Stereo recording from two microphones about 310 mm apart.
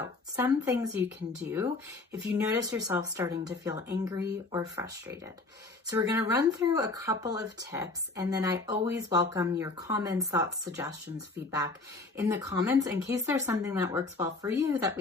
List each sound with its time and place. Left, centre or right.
0.3 s speech: centre
12.1 s speech: centre